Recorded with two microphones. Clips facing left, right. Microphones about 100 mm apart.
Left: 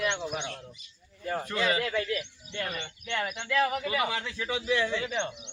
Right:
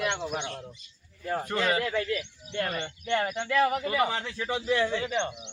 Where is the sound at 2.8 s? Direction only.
35° right (ahead or behind).